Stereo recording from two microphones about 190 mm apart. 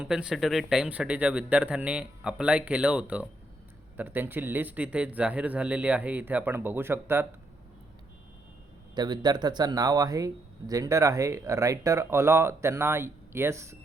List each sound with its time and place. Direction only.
0.0 s speech: 5° right (ahead or behind)
9.0 s speech: 20° right (ahead or behind)